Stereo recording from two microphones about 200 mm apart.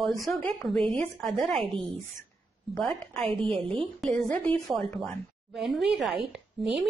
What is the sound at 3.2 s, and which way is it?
Speech, 25° right (ahead or behind).